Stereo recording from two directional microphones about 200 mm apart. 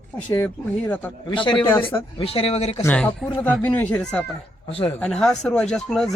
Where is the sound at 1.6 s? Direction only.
10° left (ahead or behind).